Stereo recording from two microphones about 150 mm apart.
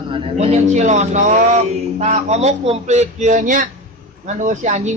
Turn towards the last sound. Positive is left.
turn(degrees=-50)  # may be behind; listen again after turning